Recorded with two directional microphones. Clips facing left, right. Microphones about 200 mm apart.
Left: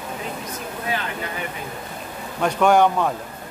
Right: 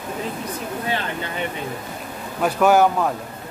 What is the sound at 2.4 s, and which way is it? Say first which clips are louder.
Speech: right 1 dB; 5° right (ahead or behind).